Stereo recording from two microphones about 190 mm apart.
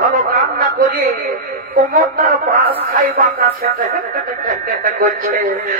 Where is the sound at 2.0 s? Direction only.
45° right (ahead or behind).